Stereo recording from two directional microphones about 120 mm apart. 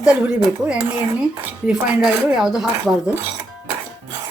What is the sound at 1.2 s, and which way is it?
Speech, 10° right (ahead or behind).